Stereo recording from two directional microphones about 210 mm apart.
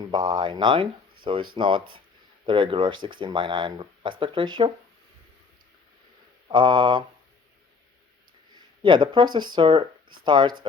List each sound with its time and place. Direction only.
0.0 s speech: 20° right (ahead or behind)
6.5 s speech: 20° right (ahead or behind)
8.8 s speech: 20° right (ahead or behind)